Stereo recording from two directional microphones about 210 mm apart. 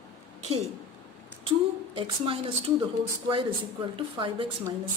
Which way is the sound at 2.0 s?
25° right (ahead or behind).